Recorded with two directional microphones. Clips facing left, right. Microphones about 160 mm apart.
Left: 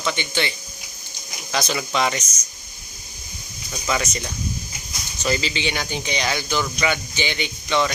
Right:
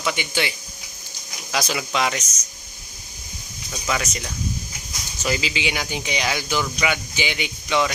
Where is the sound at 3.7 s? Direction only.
Centre (ahead or behind).